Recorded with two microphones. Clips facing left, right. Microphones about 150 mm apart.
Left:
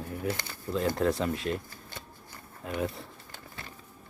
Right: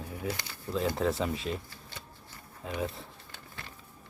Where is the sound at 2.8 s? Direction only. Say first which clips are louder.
Left 2 dB; centre (ahead or behind).